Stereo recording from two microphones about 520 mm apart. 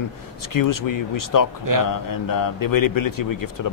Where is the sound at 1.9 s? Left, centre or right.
Left.